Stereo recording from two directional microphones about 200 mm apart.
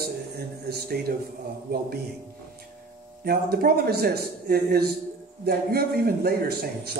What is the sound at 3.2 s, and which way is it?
A man's voice, 50° right (ahead or behind).